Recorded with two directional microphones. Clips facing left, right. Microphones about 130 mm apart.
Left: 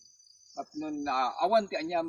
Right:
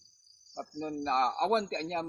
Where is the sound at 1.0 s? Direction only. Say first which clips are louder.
Right 1 dB; 35° right (ahead or behind).